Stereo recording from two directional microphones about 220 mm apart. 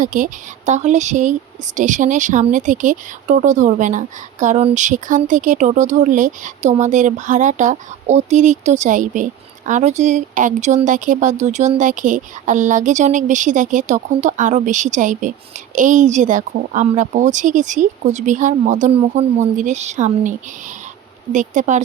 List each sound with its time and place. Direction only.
0.0 s speech: 35° right (ahead or behind)
21.3 s speech: 35° right (ahead or behind)